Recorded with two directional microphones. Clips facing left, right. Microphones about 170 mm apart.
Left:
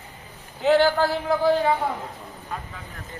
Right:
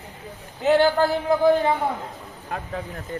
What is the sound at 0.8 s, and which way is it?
Speech, 20° right (ahead or behind).